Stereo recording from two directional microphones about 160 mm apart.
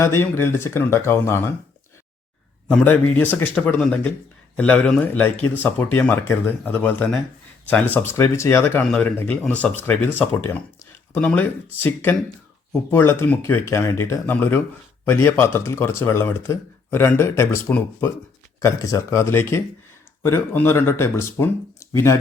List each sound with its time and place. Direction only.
0.0 s speech: 15° left (ahead or behind)
2.6 s speech: 10° left (ahead or behind)